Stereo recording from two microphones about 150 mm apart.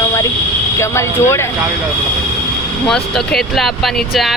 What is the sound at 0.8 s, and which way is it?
Speech, 20° left (ahead or behind).